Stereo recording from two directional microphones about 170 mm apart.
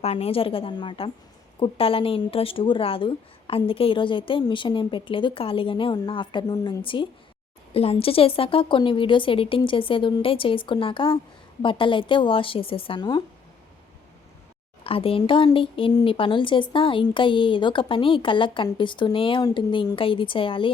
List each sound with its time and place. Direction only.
0.0 s speech: 35° left (ahead or behind)
14.8 s speech: 35° left (ahead or behind)